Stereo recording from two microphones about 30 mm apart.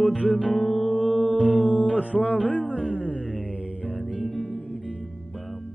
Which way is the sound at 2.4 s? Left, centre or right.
Left.